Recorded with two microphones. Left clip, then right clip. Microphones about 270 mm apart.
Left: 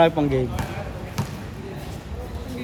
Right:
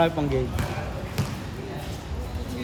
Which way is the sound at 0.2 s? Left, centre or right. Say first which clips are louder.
Left 5 dB; left.